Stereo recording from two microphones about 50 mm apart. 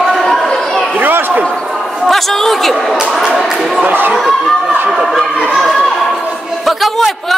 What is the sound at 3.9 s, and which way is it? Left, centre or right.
Speech, right.